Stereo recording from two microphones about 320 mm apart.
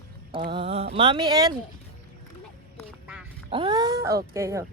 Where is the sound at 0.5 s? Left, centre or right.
Centre.